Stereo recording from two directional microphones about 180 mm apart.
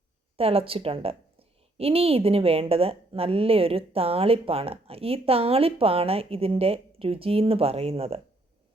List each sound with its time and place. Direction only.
0.3 s a woman's voice: 30° right (ahead or behind)